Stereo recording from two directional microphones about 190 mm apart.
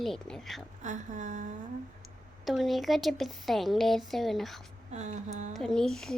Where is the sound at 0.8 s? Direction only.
40° right (ahead or behind).